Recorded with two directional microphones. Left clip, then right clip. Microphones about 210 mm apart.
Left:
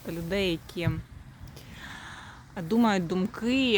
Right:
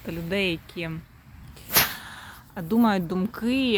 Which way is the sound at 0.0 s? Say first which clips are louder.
Right 3 dB; 5° right (ahead or behind).